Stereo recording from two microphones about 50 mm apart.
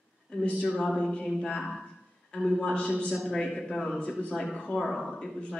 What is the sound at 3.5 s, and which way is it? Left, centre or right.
Speech, centre.